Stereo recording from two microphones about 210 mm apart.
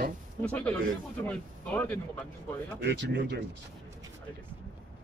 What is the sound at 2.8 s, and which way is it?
Speech, 55° right (ahead or behind).